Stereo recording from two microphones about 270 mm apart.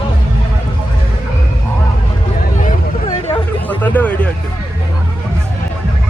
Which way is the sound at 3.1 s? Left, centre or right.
Centre.